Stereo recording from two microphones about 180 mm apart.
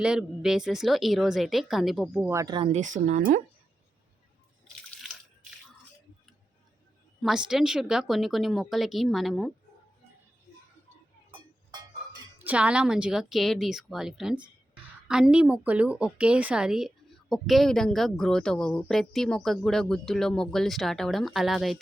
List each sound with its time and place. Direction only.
0.0 s a woman's voice: 5° right (ahead or behind)
2.3 s speech: 20° right (ahead or behind)
2.7 s speech: 45° right (ahead or behind)
7.2 s a woman's voice: centre (ahead or behind)
12.4 s a woman's voice: 10° right (ahead or behind)